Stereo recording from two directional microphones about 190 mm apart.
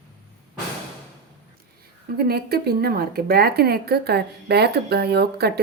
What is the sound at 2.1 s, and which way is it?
Speech, 55° right (ahead or behind).